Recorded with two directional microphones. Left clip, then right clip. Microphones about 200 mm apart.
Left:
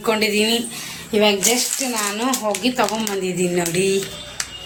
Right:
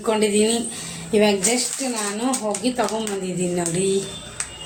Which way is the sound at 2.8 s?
5° left (ahead or behind).